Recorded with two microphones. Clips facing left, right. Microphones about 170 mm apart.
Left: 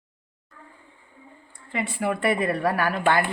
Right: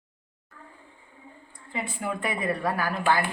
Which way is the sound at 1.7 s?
75° left (ahead or behind).